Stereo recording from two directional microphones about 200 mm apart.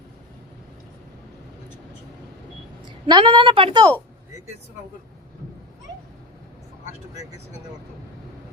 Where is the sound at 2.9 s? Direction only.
25° right (ahead or behind).